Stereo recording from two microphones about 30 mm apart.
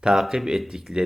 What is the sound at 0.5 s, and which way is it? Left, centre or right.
Speech, centre.